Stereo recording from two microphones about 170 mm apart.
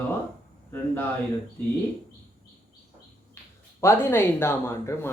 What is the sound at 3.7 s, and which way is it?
Speech, 15° left (ahead or behind).